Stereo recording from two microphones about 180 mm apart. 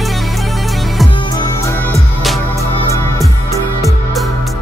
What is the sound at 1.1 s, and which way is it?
Music, 25° left (ahead or behind).